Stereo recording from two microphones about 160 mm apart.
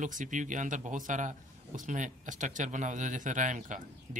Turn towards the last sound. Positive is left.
turn(degrees=-50)  # may be behind; listen again after turning